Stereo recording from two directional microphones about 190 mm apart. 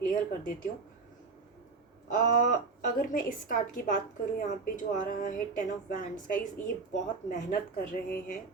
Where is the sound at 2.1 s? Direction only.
45° left (ahead or behind).